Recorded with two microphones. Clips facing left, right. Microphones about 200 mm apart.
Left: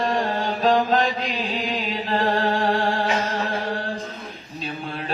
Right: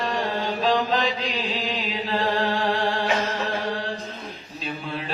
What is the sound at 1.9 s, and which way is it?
Music, 50° left (ahead or behind).